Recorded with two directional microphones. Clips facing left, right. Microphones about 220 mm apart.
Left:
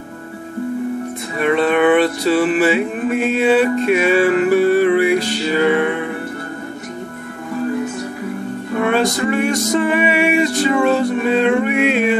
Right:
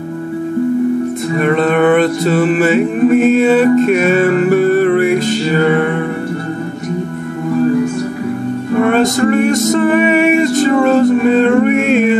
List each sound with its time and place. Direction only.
1.4 s music: 45° right (ahead or behind)
8.8 s music: 45° right (ahead or behind)